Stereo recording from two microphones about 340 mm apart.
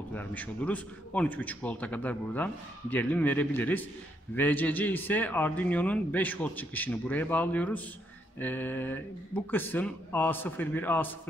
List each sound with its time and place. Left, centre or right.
0.1 s a man's voice: centre